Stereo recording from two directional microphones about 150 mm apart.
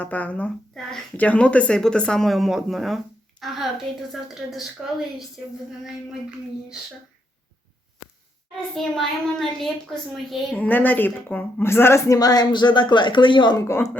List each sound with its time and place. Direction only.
0.0 s a woman's voice: 10° left (ahead or behind)
8.7 s a woman's voice: 5° left (ahead or behind); by 13.8 s 20° left (ahead or behind)